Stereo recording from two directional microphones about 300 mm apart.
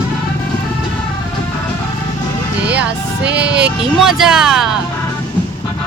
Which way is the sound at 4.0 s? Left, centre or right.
Centre.